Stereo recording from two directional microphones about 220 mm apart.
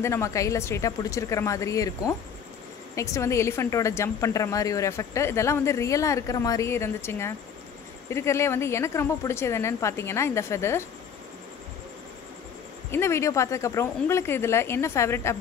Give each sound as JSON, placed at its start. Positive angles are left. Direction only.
{"t": 0.0, "sound": "a woman's voice", "side_deg": 10}
{"t": 12.9, "sound": "a woman's voice", "side_deg": 10}